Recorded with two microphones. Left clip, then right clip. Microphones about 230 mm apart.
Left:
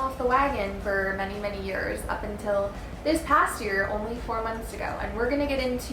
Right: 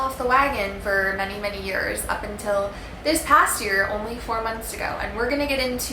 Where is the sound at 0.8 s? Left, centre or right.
Centre.